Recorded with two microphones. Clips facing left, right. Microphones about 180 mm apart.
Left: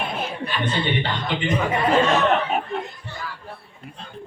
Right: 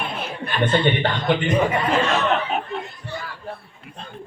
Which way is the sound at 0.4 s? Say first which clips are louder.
Right 8 dB; 55° right (ahead or behind).